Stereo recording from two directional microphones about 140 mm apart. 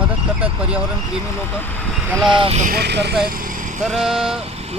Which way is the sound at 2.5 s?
65° right (ahead or behind).